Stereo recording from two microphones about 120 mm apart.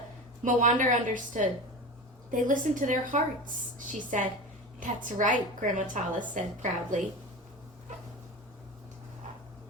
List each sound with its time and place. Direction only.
0.4 s a woman's voice: 90° right